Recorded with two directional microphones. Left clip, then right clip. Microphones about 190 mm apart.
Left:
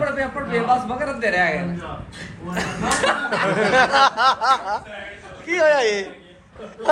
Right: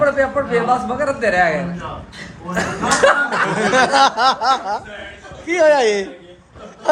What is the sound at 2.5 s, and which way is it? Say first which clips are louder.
Speech: right 5 dB; 65° right (ahead or behind).